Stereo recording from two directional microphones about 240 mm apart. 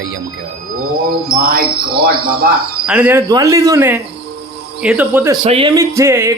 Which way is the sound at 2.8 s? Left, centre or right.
Centre.